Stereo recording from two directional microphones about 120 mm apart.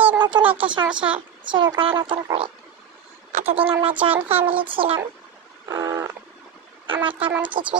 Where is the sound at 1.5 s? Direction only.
40° right (ahead or behind).